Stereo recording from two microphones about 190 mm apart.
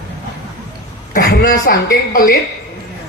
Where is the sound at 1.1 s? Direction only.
55° left (ahead or behind).